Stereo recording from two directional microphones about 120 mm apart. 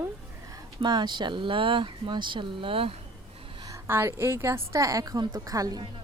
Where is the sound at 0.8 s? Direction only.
40° right (ahead or behind).